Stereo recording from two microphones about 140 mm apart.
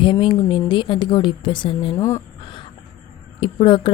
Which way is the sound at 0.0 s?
35° left (ahead or behind).